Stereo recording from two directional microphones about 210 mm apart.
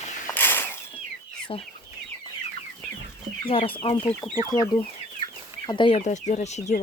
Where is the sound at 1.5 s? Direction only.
25° left (ahead or behind).